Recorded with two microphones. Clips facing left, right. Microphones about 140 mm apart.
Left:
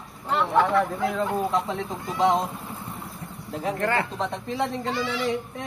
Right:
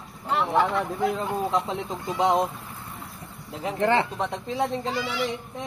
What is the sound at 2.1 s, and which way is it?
Speech, 15° right (ahead or behind).